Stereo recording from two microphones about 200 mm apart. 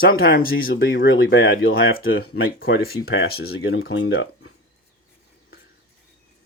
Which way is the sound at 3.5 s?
85° left.